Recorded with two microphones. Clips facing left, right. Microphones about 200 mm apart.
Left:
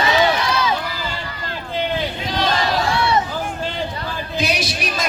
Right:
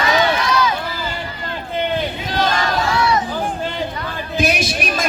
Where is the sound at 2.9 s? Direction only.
30° left (ahead or behind).